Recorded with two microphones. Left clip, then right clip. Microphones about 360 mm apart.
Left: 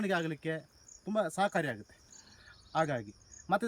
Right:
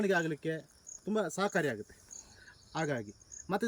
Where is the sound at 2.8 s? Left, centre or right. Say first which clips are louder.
Left 3 dB; centre.